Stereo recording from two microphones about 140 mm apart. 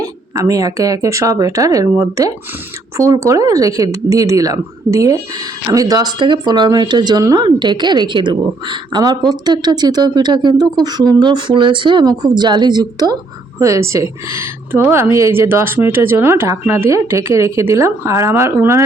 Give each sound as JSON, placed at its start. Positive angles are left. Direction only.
{"t": 0.0, "sound": "speech", "side_deg": -25}